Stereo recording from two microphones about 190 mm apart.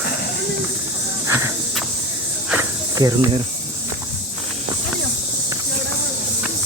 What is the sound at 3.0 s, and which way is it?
Speech, 20° right (ahead or behind).